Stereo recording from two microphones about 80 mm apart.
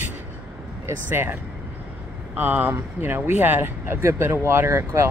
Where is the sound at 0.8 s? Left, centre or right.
Right.